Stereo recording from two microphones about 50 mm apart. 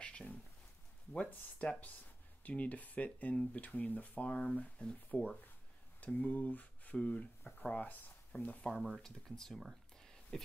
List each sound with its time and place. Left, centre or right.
0.0 s a sound: left
1.1 s speech: left
8.7 s speech: centre
9.0 s speech: centre